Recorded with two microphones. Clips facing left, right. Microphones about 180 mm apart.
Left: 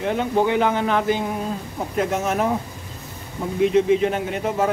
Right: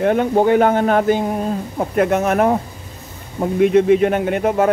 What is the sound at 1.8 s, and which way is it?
Speech, 60° right (ahead or behind).